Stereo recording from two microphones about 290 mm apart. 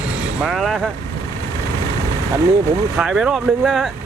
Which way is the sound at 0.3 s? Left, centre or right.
Centre.